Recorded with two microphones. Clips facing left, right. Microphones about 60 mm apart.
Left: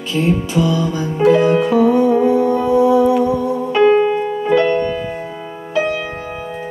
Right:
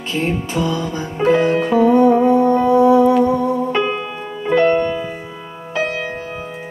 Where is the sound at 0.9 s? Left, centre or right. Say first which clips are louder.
Left 2 dB; right.